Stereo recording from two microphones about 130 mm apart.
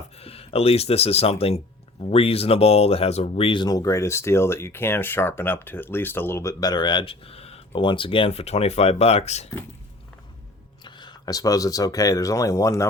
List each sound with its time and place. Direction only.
0.2 s speech: 50° left (ahead or behind)
3.6 s speech: 30° left (ahead or behind); by 9.5 s 60° left (ahead or behind)
10.8 s speech: 35° left (ahead or behind)